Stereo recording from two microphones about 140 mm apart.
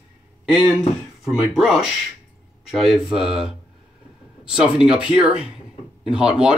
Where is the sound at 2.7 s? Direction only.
Centre (ahead or behind).